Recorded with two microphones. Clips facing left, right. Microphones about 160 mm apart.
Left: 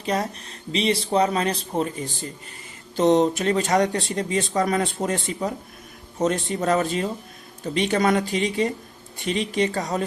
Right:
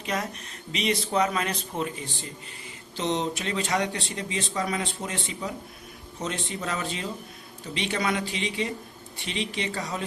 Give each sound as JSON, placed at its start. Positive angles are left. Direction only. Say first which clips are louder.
{"t": 0.0, "sound": "a man's voice", "louder": "left 5 dB", "side_deg": 35}
{"t": 2.9, "sound": "speech", "louder": "left 10 dB", "side_deg": 45}